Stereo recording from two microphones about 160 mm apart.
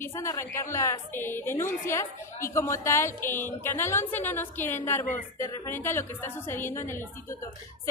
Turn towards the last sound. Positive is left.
turn(degrees=15)  # may be behind; listen again after turning